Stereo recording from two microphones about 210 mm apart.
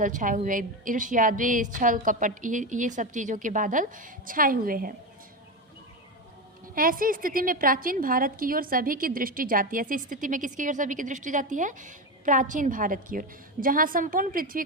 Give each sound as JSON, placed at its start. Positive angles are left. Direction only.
{"t": 0.0, "sound": "a woman's voice", "side_deg": -40}
{"t": 6.7, "sound": "a woman's voice", "side_deg": -40}